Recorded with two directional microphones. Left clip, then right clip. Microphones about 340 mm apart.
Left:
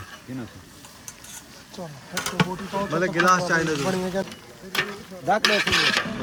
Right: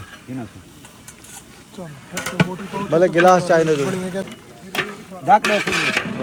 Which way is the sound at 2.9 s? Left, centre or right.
Centre.